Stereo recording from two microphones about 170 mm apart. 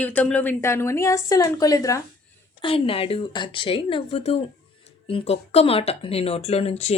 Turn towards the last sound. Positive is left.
turn(degrees=35)  # may be behind; listen again after turning